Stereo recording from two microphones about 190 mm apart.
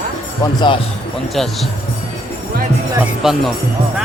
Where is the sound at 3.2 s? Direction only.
Centre (ahead or behind).